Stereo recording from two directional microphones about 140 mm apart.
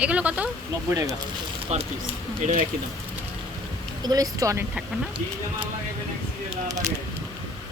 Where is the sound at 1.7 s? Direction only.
50° right (ahead or behind).